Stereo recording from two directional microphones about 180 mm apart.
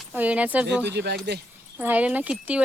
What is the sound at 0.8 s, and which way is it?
Speech, 70° right (ahead or behind).